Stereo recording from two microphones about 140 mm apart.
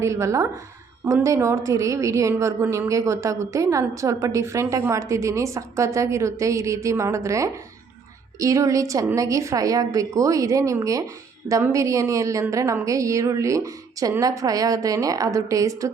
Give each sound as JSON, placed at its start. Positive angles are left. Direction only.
{"t": 0.0, "sound": "a woman's voice", "side_deg": -20}